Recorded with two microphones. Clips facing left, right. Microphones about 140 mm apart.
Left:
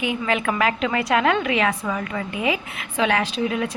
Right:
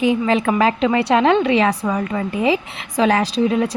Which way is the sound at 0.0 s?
35° right (ahead or behind).